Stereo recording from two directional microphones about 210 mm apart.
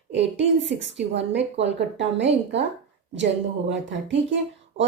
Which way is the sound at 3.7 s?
60° right (ahead or behind).